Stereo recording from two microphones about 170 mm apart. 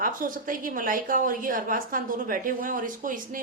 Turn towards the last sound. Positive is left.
turn(degrees=-50)  # may be behind; listen again after turning